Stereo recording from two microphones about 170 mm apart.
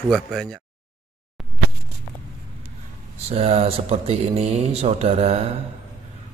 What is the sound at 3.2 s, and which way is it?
Speech, 35° right (ahead or behind).